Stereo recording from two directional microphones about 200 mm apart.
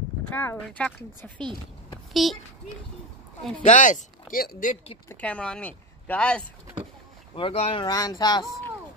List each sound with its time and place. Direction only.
0.3 s a child's voice: 10° left (ahead or behind)
3.5 s speech: 35° left (ahead or behind)
5.1 s speech: 5° left (ahead or behind)
7.3 s speech: 30° left (ahead or behind)